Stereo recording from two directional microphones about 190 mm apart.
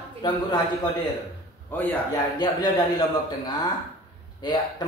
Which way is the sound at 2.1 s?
20° left (ahead or behind).